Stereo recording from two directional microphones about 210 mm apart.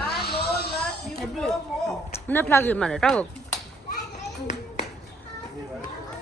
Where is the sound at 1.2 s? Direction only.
Centre (ahead or behind).